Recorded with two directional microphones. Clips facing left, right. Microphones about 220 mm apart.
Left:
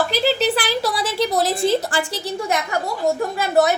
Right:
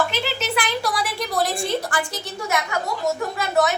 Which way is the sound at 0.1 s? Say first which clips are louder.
Left 7 dB; 35° left (ahead or behind).